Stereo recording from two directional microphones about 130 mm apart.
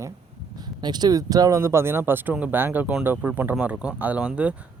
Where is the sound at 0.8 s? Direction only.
35° right (ahead or behind).